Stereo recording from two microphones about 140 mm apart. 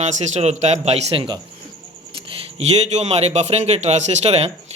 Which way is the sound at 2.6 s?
50° right (ahead or behind).